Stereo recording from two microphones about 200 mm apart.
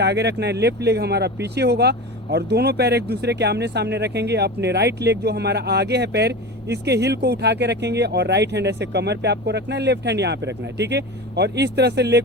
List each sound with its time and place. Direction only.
0.0 s speech: 60° right (ahead or behind)